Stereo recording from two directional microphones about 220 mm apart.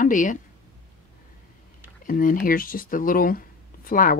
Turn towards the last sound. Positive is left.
turn(degrees=35)  # may be behind; listen again after turning